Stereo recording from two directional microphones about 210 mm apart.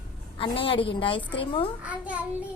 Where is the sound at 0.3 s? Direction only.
25° left (ahead or behind).